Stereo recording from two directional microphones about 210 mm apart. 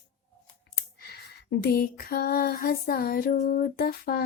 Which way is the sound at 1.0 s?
50° left (ahead or behind).